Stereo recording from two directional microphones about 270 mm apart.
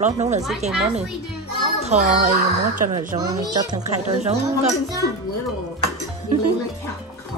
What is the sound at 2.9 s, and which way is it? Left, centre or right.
Speech, centre.